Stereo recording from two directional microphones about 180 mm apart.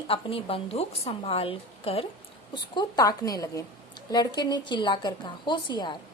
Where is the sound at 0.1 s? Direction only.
30° left (ahead or behind).